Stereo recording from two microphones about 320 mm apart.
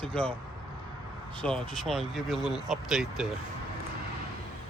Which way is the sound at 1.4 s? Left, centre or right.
Centre.